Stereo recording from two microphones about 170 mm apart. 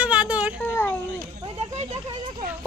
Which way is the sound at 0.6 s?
15° left (ahead or behind).